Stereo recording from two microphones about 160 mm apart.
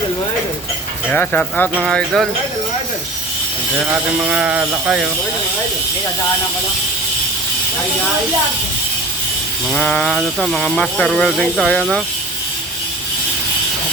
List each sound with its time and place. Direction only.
1.1 s speech: 10° left (ahead or behind)
3.8 s speech: 10° right (ahead or behind)
9.6 s speech: 5° left (ahead or behind)